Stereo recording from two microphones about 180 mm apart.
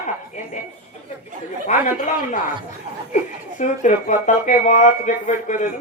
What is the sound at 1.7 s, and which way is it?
Speech, 45° left (ahead or behind).